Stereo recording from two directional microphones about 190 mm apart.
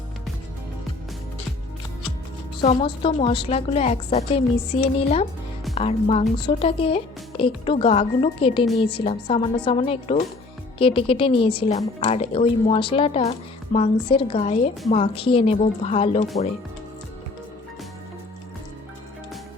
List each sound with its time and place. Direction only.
2.6 s a woman's voice: 25° left (ahead or behind)